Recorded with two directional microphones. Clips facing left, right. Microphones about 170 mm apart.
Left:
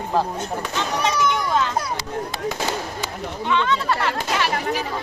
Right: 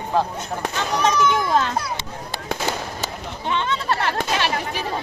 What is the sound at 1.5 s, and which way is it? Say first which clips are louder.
Speech: right 1 dB; 35° right (ahead or behind).